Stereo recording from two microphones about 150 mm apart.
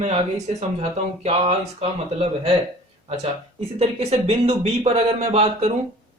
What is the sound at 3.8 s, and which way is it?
Speech, 45° right (ahead or behind).